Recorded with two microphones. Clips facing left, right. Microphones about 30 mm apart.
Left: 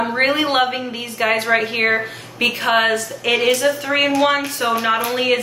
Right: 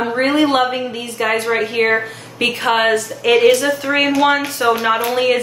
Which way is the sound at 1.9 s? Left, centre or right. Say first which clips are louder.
Right 2 dB; centre.